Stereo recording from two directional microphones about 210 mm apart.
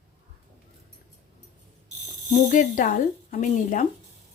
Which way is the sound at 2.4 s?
35° left (ahead or behind).